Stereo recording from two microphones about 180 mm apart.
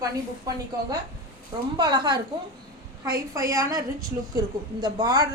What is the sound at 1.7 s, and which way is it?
Speech, 25° right (ahead or behind).